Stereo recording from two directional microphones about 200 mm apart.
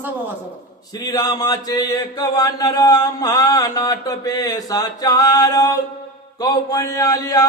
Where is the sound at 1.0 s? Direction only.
20° left (ahead or behind).